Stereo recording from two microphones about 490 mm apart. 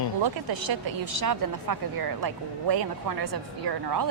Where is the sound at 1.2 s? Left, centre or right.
Right.